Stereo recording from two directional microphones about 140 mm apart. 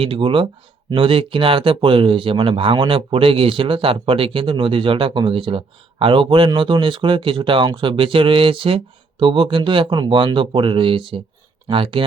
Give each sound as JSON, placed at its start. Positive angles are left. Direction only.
{"t": 0.0, "sound": "speech", "side_deg": -40}